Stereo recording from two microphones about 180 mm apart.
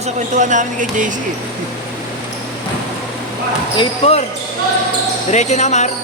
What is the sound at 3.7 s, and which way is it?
Speech, 30° left (ahead or behind).